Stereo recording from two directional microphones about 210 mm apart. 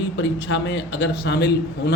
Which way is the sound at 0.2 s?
60° left (ahead or behind).